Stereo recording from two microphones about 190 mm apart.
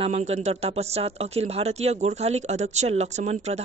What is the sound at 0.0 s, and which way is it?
Speech, 35° right (ahead or behind).